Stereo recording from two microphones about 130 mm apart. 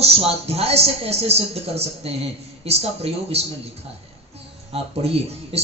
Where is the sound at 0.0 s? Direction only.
50° right (ahead or behind).